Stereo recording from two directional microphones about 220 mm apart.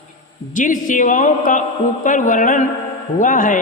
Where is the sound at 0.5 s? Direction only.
35° left (ahead or behind).